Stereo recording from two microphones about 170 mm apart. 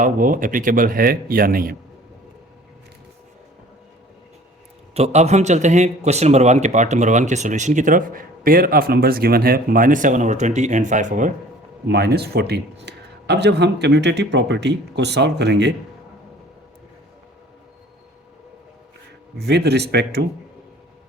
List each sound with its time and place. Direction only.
0.0 s speech: 50° right (ahead or behind)
4.9 s a man's voice: 40° right (ahead or behind)
11.9 s speech: 70° right (ahead or behind); by 15.7 s 90° right
19.4 s speech: 75° right (ahead or behind)